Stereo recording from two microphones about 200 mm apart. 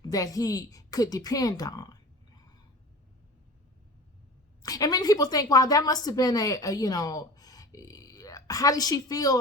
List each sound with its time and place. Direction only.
0.0 s a woman's voice: 20° left (ahead or behind)
4.6 s a woman's voice: 20° left (ahead or behind)